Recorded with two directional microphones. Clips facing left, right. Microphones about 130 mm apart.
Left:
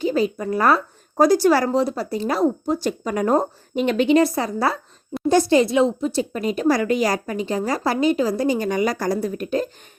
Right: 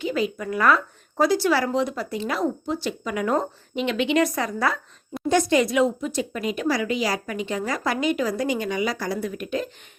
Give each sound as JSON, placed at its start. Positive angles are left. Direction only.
{"t": 0.0, "sound": "speech", "side_deg": 35}